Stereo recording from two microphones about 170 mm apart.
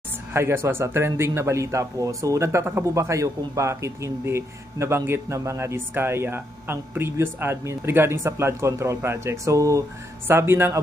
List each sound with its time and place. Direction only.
0.3 s a man's voice: 15° right (ahead or behind)